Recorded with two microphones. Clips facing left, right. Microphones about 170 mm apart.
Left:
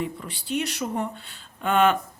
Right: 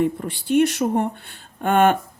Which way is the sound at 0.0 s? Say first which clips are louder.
Right 9 dB; 50° right (ahead or behind).